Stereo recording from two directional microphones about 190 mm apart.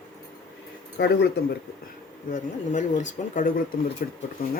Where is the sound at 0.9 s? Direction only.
60° left (ahead or behind).